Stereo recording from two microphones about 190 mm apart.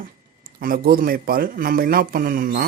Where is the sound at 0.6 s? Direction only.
50° right (ahead or behind).